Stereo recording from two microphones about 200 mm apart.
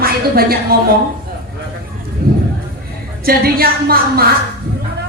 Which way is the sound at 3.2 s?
50° right (ahead or behind).